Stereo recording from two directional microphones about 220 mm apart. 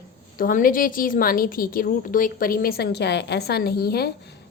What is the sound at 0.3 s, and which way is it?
A woman's voice, 40° left (ahead or behind).